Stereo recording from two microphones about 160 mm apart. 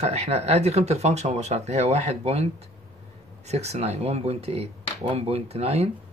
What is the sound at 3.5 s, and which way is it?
Speech, 40° right (ahead or behind).